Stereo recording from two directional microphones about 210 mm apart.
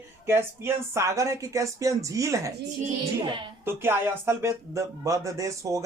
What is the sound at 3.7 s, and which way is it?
A woman's voice, 10° right (ahead or behind).